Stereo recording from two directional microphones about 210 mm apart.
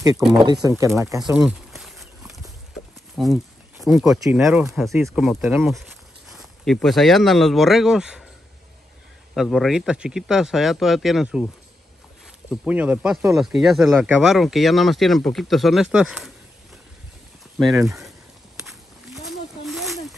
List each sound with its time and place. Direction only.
0.3 s speech: 20° right (ahead or behind)
1.2 s a sound: 5° right (ahead or behind)
3.2 s speech: centre (ahead or behind)
9.3 s speech: centre (ahead or behind)
18.6 s snake: centre (ahead or behind)